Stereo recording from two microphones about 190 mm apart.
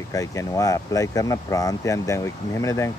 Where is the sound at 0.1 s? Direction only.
15° left (ahead or behind).